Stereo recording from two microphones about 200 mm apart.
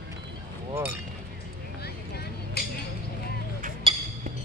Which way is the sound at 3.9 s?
25° right (ahead or behind).